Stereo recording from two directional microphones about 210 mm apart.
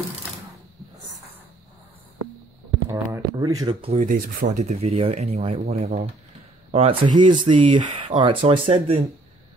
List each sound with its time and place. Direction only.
2.9 s speech: 15° right (ahead or behind)